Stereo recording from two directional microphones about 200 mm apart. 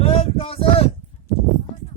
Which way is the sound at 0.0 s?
30° left (ahead or behind).